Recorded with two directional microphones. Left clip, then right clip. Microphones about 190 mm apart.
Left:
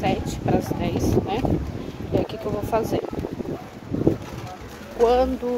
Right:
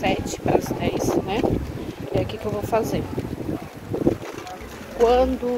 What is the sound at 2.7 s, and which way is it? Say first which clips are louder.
Speech: right 1 dB; 10° left (ahead or behind).